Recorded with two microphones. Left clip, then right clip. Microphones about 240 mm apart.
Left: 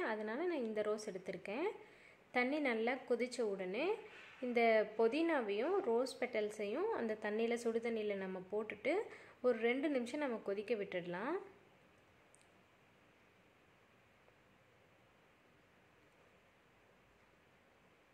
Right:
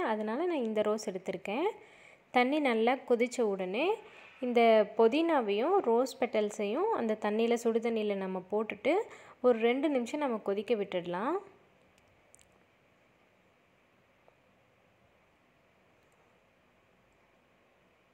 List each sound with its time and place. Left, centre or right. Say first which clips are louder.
0.0 s a woman's voice: right 8 dB; right